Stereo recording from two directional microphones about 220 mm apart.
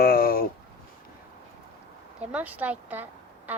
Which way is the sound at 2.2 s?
5° right (ahead or behind).